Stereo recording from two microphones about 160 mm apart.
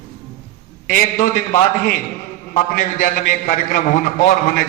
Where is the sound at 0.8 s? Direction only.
55° left (ahead or behind).